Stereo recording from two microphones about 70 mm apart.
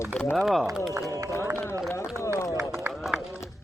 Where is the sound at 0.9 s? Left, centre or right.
Right.